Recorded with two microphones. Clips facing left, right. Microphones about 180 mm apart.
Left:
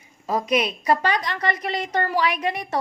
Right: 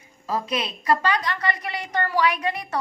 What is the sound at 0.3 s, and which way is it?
A woman's voice, 15° left (ahead or behind).